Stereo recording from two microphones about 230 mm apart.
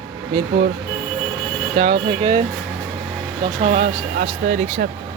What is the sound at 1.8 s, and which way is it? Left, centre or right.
Speech, right.